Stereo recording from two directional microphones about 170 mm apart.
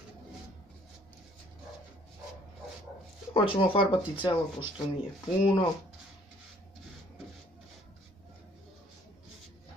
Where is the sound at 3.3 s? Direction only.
30° left (ahead or behind).